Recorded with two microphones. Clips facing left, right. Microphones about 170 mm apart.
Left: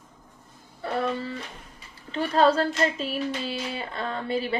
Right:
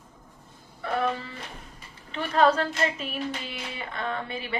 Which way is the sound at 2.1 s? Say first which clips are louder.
Left 1 dB; 30° left (ahead or behind).